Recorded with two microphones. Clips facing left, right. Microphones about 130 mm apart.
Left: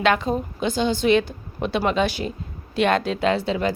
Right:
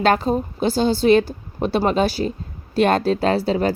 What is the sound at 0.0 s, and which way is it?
A woman's voice, 35° right (ahead or behind).